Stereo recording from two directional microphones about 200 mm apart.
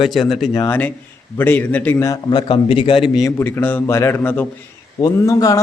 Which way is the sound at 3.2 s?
10° left (ahead or behind).